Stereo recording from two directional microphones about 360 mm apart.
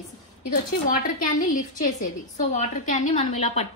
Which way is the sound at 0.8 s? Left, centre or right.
Left.